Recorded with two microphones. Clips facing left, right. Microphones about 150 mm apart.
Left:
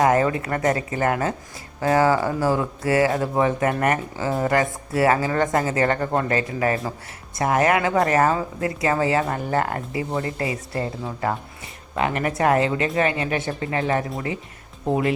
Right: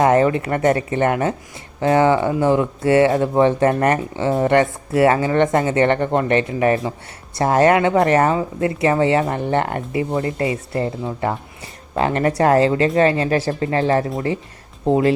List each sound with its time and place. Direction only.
0.0 s speech: 25° right (ahead or behind)
11.2 s a sound: 30° right (ahead or behind)
12.4 s speech: 30° right (ahead or behind)